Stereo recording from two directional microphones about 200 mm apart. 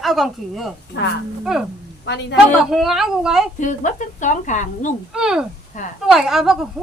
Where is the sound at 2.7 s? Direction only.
Centre (ahead or behind).